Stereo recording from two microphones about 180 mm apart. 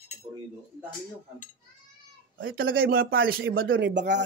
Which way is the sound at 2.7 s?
55° right (ahead or behind).